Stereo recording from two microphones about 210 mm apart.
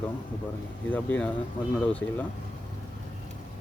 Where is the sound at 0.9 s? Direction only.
10° left (ahead or behind).